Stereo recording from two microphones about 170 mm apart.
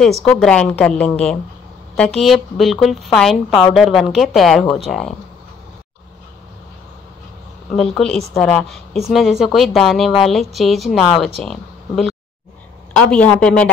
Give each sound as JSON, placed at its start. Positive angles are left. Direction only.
{"t": 0.0, "sound": "a woman's voice", "side_deg": 5}
{"t": 7.7, "sound": "a woman's voice", "side_deg": 0}
{"t": 13.1, "sound": "speech", "side_deg": 5}